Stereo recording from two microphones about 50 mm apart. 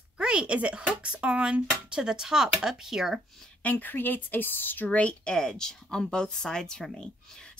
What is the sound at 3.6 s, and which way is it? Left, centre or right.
Speech, left.